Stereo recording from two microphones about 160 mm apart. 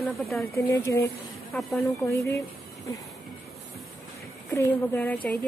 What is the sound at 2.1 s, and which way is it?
Speech, 20° left (ahead or behind).